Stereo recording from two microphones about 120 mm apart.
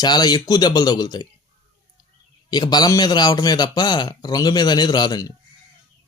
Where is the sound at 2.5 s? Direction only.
35° left (ahead or behind).